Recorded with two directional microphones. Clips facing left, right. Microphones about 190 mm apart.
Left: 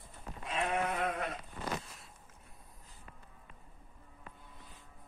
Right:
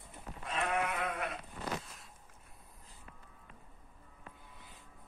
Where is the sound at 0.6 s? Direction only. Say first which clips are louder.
Left 1 dB; 35° left (ahead or behind).